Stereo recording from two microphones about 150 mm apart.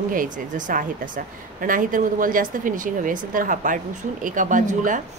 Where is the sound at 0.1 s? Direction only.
60° right (ahead or behind).